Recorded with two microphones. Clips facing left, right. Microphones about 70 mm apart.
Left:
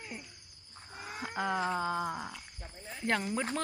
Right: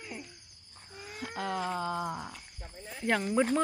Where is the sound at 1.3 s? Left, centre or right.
Centre.